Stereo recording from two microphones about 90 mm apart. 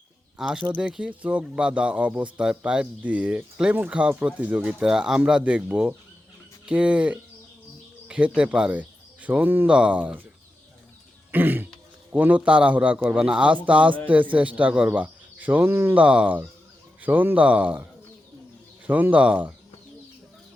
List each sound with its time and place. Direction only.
0.3 s speech: 5° right (ahead or behind)
8.0 s a sound: 15° right (ahead or behind)
8.4 s speech: 10° right (ahead or behind)
11.3 s throat clearing: 20° right (ahead or behind)
12.1 s speech: 15° right (ahead or behind)
16.0 s speech: 15° right (ahead or behind)
18.9 s speech: 20° right (ahead or behind)